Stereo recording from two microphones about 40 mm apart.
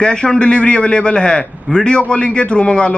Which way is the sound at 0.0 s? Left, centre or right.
Left.